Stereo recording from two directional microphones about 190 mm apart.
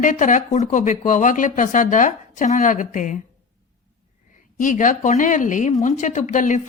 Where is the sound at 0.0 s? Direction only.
40° left (ahead or behind).